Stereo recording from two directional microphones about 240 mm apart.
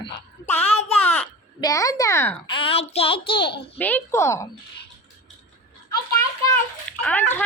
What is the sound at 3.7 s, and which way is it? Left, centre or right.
Speech, centre.